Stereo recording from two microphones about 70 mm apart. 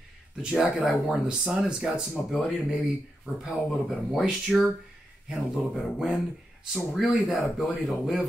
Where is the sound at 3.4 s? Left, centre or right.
Centre.